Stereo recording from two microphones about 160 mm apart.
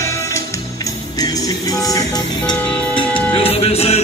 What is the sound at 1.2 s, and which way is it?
Music, 20° left (ahead or behind).